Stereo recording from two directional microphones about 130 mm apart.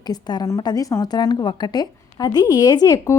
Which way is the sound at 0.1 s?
30° left (ahead or behind).